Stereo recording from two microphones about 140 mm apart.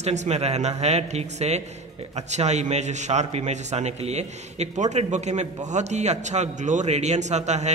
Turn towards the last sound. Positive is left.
turn(degrees=-55)  # may be behind; listen again after turning